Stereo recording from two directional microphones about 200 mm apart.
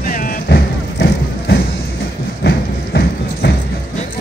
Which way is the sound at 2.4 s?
55° left (ahead or behind).